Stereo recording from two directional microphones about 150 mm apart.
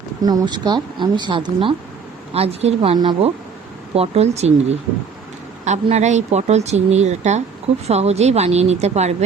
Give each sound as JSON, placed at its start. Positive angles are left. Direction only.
{"t": 0.2, "sound": "speech", "side_deg": -25}
{"t": 2.9, "sound": "speech", "side_deg": -30}
{"t": 3.9, "sound": "speech", "side_deg": -45}